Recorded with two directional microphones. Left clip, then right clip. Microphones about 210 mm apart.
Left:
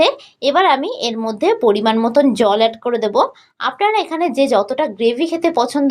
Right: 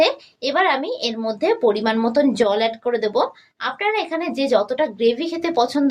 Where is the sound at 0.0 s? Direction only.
35° left (ahead or behind).